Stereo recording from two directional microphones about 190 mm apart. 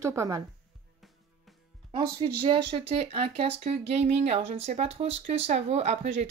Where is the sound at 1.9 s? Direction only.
25° right (ahead or behind).